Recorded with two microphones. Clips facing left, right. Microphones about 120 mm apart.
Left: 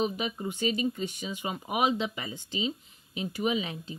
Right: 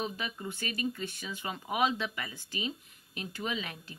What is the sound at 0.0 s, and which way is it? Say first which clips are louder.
Speech: left 6 dB; 20° left (ahead or behind).